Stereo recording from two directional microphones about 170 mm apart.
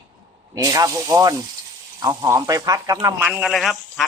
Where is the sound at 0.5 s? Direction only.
20° right (ahead or behind).